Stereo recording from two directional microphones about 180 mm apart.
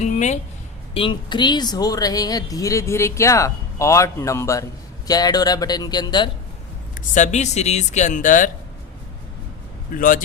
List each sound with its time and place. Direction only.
0.0 s speech: 40° left (ahead or behind)
0.9 s speech: 25° left (ahead or behind)
7.1 s speech: 40° left (ahead or behind)
9.9 s speech: 50° left (ahead or behind)